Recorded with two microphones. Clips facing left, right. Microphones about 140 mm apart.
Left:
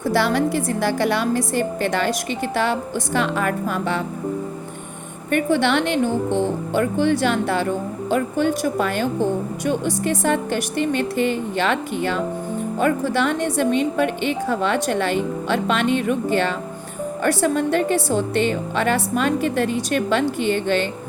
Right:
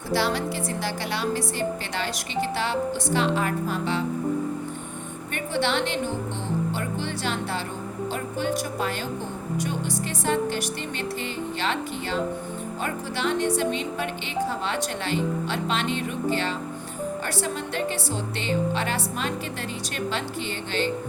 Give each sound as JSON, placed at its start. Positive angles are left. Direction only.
{"t": 0.1, "sound": "a woman's voice", "side_deg": 50}
{"t": 5.3, "sound": "a woman's voice", "side_deg": 50}